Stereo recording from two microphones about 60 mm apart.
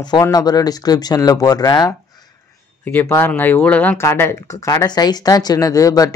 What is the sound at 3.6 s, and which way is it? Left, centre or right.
Speech, left.